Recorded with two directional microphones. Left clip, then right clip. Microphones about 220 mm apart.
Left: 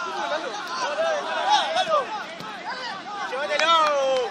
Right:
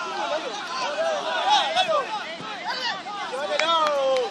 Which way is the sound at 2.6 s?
30° right (ahead or behind).